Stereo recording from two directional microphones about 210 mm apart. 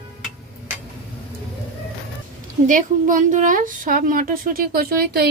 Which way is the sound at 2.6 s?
40° right (ahead or behind).